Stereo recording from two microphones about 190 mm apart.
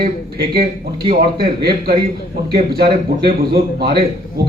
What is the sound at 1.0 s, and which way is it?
A man's voice, 55° right (ahead or behind).